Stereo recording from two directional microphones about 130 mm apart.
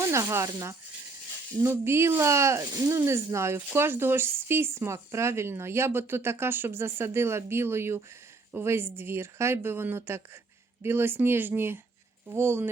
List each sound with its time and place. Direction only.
0.0 s speech: 25° right (ahead or behind)